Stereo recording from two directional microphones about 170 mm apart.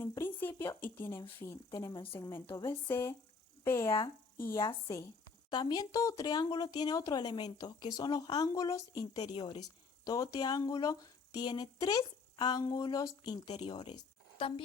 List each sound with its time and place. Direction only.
0.0 s a woman's voice: 15° left (ahead or behind); by 14.6 s 30° left (ahead or behind)